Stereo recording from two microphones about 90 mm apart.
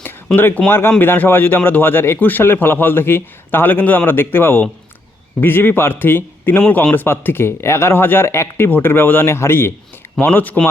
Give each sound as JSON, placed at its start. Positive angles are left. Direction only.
{"t": 0.3, "sound": "a man's voice", "side_deg": 25}